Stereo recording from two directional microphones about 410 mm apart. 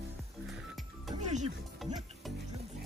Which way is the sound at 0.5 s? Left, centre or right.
Centre.